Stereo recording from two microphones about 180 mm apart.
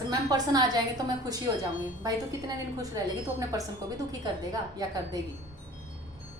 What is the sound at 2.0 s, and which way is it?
A woman's voice, 20° right (ahead or behind).